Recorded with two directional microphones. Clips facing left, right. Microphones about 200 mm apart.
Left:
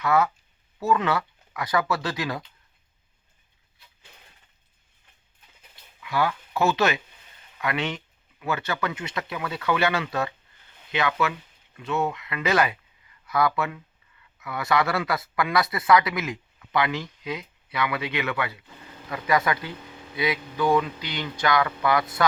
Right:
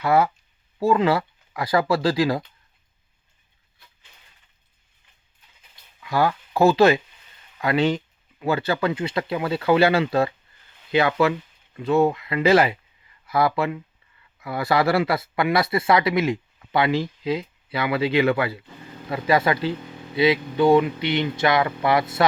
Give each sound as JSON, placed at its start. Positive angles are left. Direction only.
{"t": 0.0, "sound": "speech", "side_deg": -30}
{"t": 6.0, "sound": "speech", "side_deg": -40}